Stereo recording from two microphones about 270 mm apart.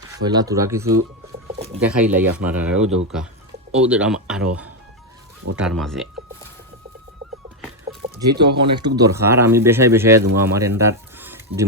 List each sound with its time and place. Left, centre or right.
0.2 s speech: centre
5.5 s speech: centre
8.1 s speech: centre